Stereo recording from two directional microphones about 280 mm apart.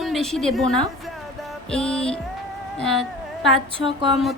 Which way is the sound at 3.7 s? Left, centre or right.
Centre.